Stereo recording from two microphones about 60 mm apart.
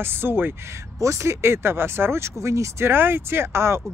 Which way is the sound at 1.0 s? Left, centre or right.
Right.